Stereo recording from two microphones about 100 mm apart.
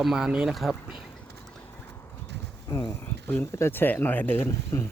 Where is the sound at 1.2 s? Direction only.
5° left (ahead or behind).